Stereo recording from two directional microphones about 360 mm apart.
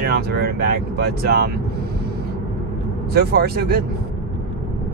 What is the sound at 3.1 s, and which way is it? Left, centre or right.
Speech, right.